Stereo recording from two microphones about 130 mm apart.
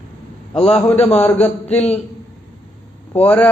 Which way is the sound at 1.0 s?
50° left (ahead or behind).